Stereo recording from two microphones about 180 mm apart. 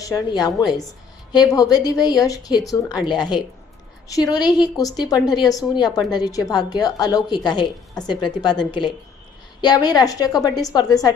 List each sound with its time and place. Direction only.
0.0 s a woman's voice: 20° left (ahead or behind)